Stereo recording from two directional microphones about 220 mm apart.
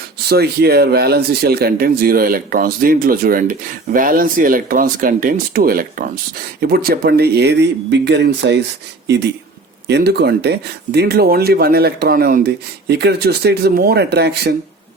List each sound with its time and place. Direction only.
0.3 s speech: 45° right (ahead or behind)